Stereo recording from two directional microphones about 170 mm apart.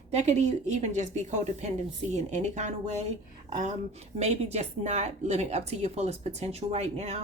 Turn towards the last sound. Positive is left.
turn(degrees=-40)  # may be behind; listen again after turning